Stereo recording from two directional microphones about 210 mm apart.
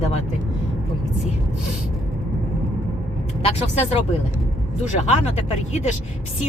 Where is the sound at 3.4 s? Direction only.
30° left (ahead or behind).